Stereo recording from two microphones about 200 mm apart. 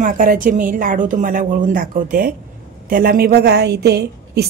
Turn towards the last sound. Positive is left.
turn(degrees=-55)  # may be behind; listen again after turning